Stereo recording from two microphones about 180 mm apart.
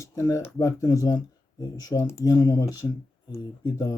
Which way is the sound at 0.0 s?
15° left (ahead or behind).